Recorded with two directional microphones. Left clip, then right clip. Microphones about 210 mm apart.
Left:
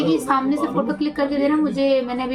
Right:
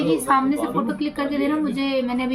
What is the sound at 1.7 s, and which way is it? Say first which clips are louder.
Speech: left 6 dB; 25° right (ahead or behind).